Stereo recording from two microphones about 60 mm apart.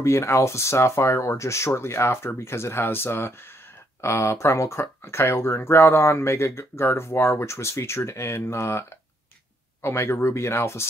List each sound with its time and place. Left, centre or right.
0.0 s speech: left